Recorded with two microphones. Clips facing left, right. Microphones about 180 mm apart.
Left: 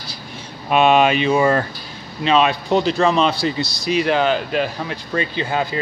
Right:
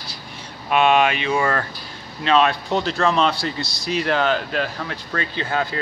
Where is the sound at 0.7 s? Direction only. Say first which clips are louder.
Left 3 dB; 25° left (ahead or behind).